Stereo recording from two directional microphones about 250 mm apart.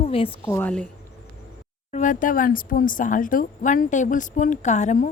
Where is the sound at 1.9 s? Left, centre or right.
Left.